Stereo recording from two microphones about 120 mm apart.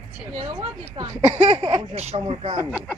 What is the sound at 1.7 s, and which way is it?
Speech, 60° right (ahead or behind).